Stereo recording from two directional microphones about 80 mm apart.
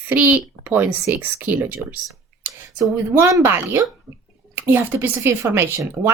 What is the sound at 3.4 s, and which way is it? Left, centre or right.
A woman's voice, right.